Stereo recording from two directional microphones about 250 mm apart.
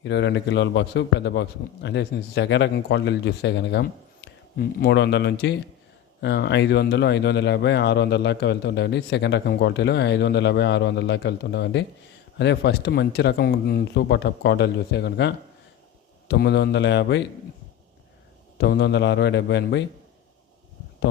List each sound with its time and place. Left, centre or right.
0.0 s a man's voice: left
16.3 s speech: left
18.5 s speech: left